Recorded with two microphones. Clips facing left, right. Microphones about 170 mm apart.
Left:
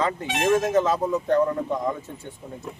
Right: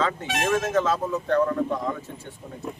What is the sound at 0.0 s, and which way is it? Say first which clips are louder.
Speech: left 2 dB; 20° left (ahead or behind).